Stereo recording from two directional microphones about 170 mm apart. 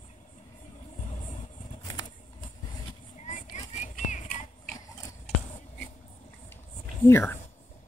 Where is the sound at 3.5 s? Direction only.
45° left (ahead or behind).